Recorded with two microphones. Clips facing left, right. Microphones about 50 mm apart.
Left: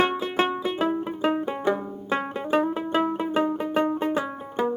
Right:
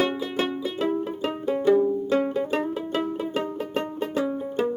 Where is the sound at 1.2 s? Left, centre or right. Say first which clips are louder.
Even; left.